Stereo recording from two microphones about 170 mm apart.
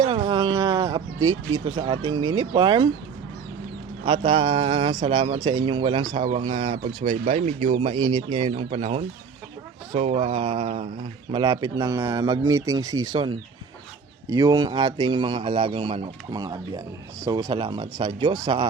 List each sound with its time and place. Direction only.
0.0 s a sound: 35° right (ahead or behind)
4.3 s speech: 30° right (ahead or behind)
11.3 s speech: 25° right (ahead or behind)